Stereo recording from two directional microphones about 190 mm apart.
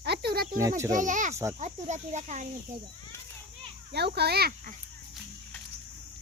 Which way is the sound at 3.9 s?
60° right (ahead or behind).